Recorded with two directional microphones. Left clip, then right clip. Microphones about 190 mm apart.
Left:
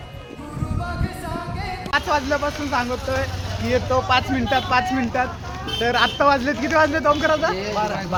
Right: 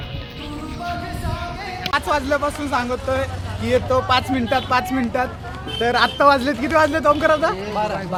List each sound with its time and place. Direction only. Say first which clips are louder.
1.9 s speech: right 1 dB; 20° right (ahead or behind)